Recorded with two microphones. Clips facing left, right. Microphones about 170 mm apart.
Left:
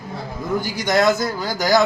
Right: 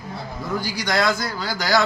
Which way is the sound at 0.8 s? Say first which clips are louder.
Left 5 dB; 20° left (ahead or behind).